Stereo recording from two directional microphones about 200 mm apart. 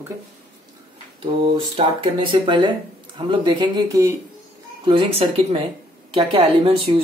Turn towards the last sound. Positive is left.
turn(degrees=-25)  # may be behind; listen again after turning